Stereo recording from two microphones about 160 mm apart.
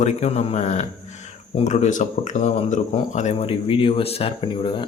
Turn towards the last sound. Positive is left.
turn(degrees=30)  # may be behind; listen again after turning